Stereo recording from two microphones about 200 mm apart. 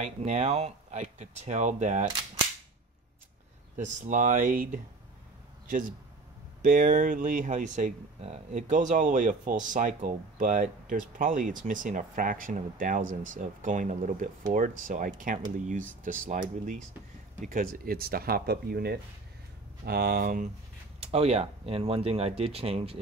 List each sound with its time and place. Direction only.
0.0 s speech: 35° right (ahead or behind)
3.7 s speech: 40° right (ahead or behind)
21.0 s speech: 30° right (ahead or behind)